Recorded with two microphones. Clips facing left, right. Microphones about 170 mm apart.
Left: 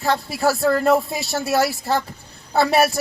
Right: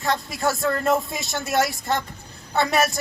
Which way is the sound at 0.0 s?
30° left (ahead or behind).